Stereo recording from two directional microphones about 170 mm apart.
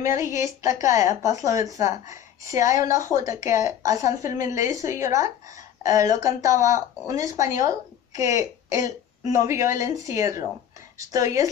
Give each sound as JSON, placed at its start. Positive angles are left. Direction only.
{"t": 0.0, "sound": "speech", "side_deg": -20}